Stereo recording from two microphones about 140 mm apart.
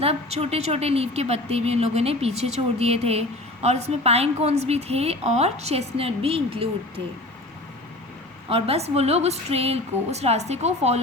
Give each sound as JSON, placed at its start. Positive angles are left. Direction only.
{"t": 0.0, "sound": "a woman's voice", "side_deg": -45}
{"t": 8.4, "sound": "a woman's voice", "side_deg": -45}